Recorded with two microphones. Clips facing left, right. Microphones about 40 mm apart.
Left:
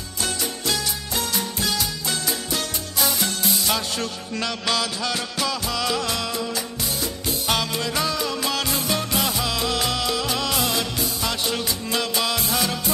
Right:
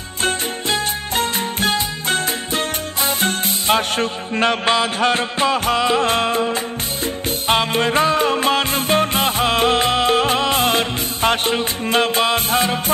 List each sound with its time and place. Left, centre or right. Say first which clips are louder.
0.2 s music: right 6 dB; right